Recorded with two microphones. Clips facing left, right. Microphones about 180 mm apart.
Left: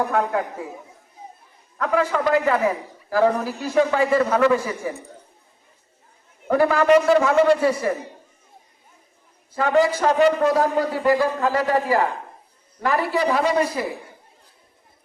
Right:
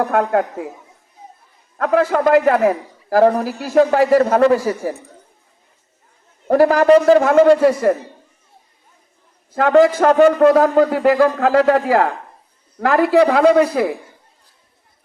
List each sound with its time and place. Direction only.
0.1 s a man's voice: 55° right (ahead or behind)
1.8 s a man's voice: 45° right (ahead or behind)
6.5 s a man's voice: 40° right (ahead or behind)
9.6 s a man's voice: 60° right (ahead or behind)